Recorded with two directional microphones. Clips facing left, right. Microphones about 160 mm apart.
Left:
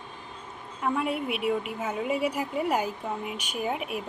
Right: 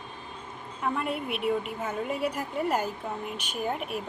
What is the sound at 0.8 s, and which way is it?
A woman's voice, 5° left (ahead or behind).